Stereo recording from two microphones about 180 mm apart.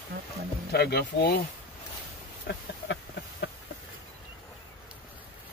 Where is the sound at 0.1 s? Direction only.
85° right.